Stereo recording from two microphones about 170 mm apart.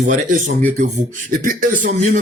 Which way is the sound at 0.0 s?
50° right (ahead or behind).